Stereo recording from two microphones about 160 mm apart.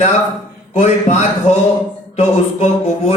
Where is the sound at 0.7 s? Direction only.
40° left (ahead or behind).